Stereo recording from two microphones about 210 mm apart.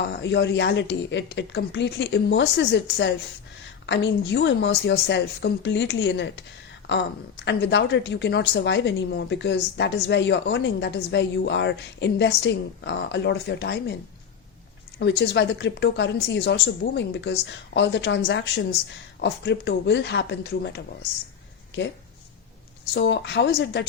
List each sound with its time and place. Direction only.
0.2 s a woman's voice: 55° left (ahead or behind)
7.4 s a woman's voice: 55° left (ahead or behind)
14.9 s a woman's voice: 55° left (ahead or behind)
23.0 s a woman's voice: 55° left (ahead or behind)